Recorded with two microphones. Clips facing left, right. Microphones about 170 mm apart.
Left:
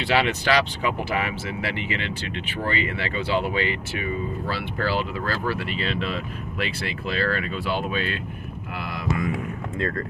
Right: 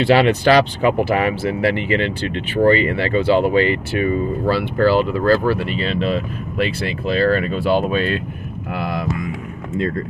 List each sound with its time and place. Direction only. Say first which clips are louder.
0.0 s speech: right 9 dB; 40° right (ahead or behind)
3.2 s speech: right 9 dB; 40° right (ahead or behind)
8.7 s speech: right 10 dB; 55° right (ahead or behind)